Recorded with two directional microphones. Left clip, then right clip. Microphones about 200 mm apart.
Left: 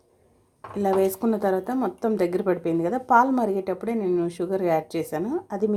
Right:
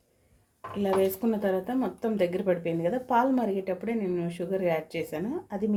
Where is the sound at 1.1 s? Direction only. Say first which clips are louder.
Left 4 dB; 20° left (ahead or behind).